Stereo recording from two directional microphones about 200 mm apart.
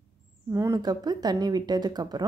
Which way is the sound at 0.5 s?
15° right (ahead or behind).